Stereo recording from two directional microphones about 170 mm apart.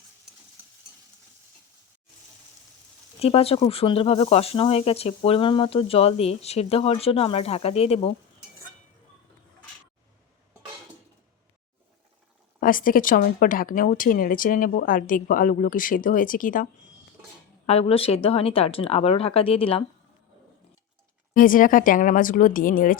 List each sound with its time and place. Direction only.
3.2 s speech: 35° left (ahead or behind)
12.5 s speech: 55° left (ahead or behind)
17.7 s speech: 35° left (ahead or behind)
21.3 s speech: 55° left (ahead or behind)